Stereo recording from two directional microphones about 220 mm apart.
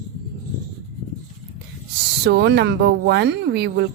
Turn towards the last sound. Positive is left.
turn(degrees=-50)  # may be behind; listen again after turning